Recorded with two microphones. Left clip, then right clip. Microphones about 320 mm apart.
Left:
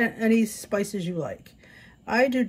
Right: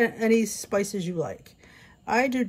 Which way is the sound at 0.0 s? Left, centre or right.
Centre.